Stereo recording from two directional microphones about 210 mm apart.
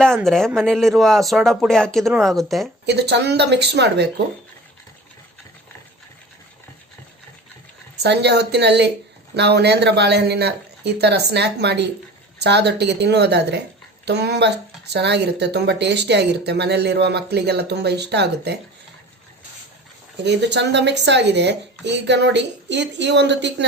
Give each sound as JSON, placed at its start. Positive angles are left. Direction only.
{"t": 0.3, "sound": "speech", "side_deg": 0}
{"t": 2.8, "sound": "speech", "side_deg": -55}
{"t": 8.0, "sound": "speech", "side_deg": -55}
{"t": 20.2, "sound": "speech", "side_deg": -55}